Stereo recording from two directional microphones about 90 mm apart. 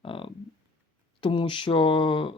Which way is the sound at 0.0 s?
75° left (ahead or behind).